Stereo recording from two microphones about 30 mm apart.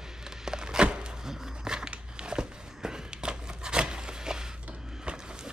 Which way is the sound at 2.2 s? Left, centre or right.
Right.